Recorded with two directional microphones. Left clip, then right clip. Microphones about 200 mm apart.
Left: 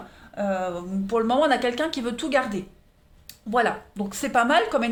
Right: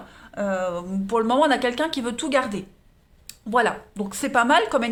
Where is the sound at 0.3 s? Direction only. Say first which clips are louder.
Right 1 dB; 30° right (ahead or behind).